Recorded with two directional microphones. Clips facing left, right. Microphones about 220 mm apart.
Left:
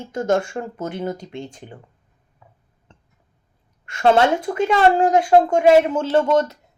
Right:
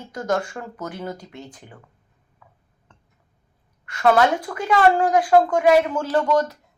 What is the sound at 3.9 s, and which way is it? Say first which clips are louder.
Speech: left 2 dB; 25° left (ahead or behind).